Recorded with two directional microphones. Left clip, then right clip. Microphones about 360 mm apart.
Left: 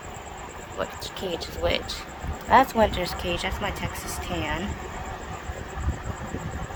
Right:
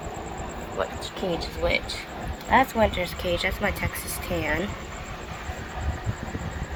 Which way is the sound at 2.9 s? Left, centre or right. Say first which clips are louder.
Right 1 dB; centre.